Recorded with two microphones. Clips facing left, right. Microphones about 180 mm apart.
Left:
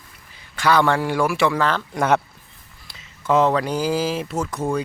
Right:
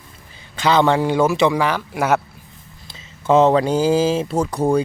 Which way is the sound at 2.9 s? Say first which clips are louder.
Right 4 dB; 25° right (ahead or behind).